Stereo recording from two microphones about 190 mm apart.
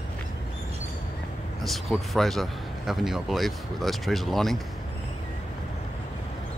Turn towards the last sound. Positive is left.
turn(degrees=0)  # may be behind; listen again after turning